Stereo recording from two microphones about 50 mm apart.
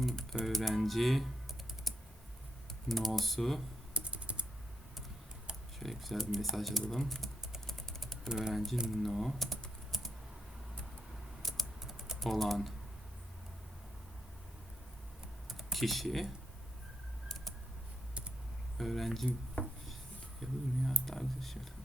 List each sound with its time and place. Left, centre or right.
0.0 s typing: centre
0.4 s speech: centre
2.9 s speech: centre
3.9 s typing: right
5.8 s speech: centre
7.7 s typing: centre
8.3 s speech: centre
8.5 s speech: centre
8.9 s typing: centre
11.4 s typing: centre
11.8 s typing: centre
15.4 s computer keyboard: centre
18.8 s dishes: centre
20.4 s speech: centre